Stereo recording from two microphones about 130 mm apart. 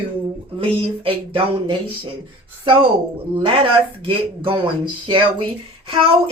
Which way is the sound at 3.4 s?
40° right (ahead or behind).